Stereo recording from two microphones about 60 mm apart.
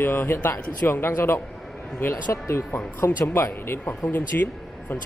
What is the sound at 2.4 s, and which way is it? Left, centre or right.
Speech, left.